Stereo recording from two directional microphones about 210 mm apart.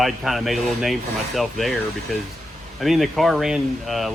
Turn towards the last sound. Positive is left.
turn(degrees=0)  # may be behind; listen again after turning